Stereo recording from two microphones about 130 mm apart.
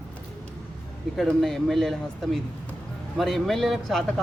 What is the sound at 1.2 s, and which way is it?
Speech, centre (ahead or behind).